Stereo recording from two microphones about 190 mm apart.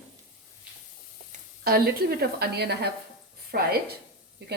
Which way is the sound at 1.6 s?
55° right (ahead or behind).